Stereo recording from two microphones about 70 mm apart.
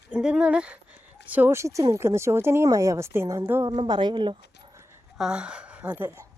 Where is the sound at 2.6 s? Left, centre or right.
Right.